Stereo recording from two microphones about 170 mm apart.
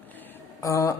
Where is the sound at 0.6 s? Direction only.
20° left (ahead or behind).